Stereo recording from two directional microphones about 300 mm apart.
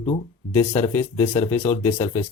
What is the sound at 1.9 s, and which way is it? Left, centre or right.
Speech, centre.